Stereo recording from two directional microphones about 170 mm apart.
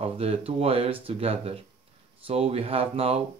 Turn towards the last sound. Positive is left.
turn(degrees=-35)  # may be behind; listen again after turning